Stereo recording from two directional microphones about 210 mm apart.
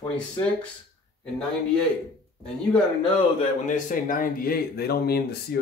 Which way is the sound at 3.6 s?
35° left (ahead or behind).